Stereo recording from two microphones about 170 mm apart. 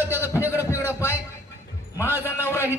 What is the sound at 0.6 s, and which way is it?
Heart sounds, 15° left (ahead or behind).